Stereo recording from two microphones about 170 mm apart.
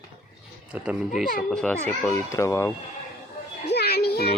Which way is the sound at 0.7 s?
10° right (ahead or behind).